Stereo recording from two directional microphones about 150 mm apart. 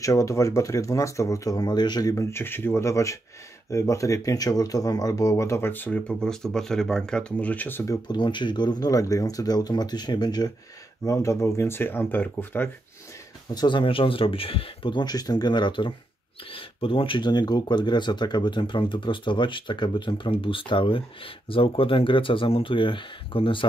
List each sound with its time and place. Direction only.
0.0 s speech: 20° left (ahead or behind)
13.6 s speech: 30° left (ahead or behind)